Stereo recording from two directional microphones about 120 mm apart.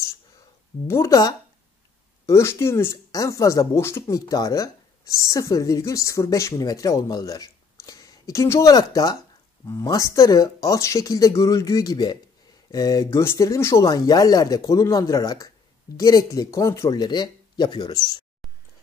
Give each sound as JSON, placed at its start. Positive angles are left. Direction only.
{"t": 0.8, "sound": "speech", "side_deg": 25}